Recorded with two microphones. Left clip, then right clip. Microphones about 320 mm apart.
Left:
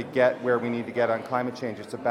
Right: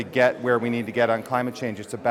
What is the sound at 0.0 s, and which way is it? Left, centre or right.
A man's voice, right.